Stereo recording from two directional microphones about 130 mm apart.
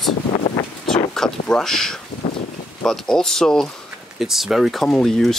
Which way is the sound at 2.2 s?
35° left (ahead or behind).